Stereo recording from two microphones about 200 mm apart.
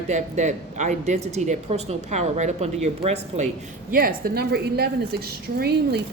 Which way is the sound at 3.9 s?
50° right (ahead or behind).